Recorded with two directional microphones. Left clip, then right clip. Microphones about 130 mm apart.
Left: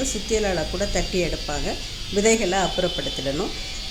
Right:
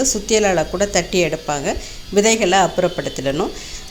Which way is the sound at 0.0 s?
10° right (ahead or behind).